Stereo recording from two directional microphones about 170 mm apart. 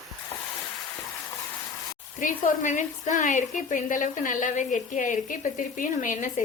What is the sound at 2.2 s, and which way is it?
A woman's voice, 50° left (ahead or behind).